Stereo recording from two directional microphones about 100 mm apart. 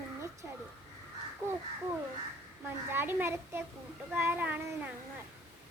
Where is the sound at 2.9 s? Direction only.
20° right (ahead or behind).